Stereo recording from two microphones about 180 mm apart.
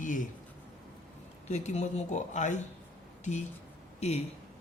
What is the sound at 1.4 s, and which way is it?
Speech, 40° left (ahead or behind).